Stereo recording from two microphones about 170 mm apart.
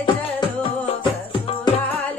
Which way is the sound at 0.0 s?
30° left (ahead or behind).